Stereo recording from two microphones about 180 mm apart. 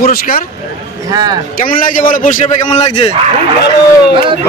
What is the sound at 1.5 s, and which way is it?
A man's voice, 50° left (ahead or behind).